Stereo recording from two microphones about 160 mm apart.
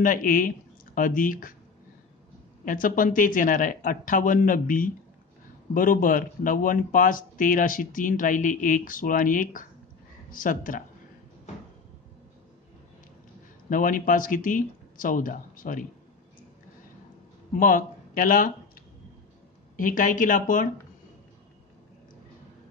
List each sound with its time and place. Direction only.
0.0 s speech: 60° left (ahead or behind)
2.6 s speech: 60° left (ahead or behind)
13.7 s speech: 60° left (ahead or behind)
17.6 s speech: 60° left (ahead or behind)